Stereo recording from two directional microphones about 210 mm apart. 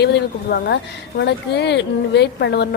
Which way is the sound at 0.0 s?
50° left (ahead or behind).